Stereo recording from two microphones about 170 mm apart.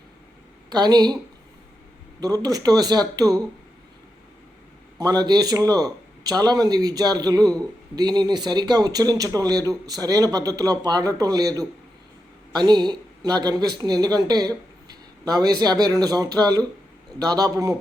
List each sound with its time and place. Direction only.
0.7 s speech: 25° right (ahead or behind)
2.2 s speech: 20° right (ahead or behind)
4.9 s speech: 25° right (ahead or behind)